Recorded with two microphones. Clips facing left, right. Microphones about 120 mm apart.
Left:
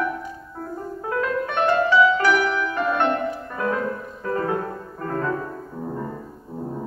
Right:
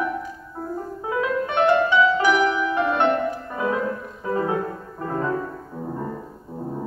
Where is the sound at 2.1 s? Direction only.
5° right (ahead or behind).